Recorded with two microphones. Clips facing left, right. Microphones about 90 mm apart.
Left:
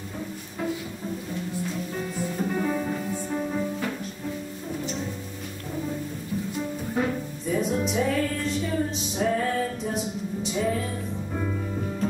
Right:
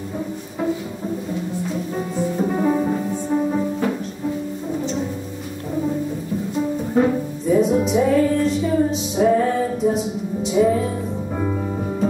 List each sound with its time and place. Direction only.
2.0 s music: 20° right (ahead or behind)
6.9 s music: 20° right (ahead or behind)
7.4 s music: 5° right (ahead or behind)